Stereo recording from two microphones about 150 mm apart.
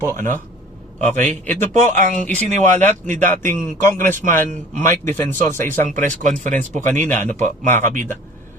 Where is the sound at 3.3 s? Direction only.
15° left (ahead or behind).